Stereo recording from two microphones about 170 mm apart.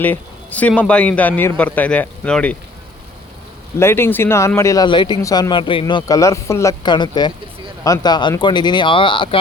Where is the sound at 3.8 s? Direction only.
15° left (ahead or behind).